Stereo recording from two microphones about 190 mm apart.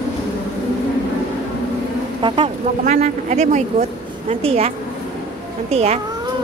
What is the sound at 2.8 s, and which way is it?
Speech, 40° right (ahead or behind).